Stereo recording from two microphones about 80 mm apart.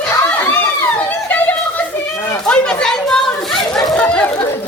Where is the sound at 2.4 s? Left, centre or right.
Centre.